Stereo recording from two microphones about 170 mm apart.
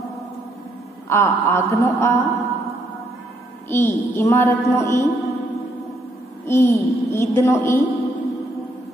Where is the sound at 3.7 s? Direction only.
15° left (ahead or behind).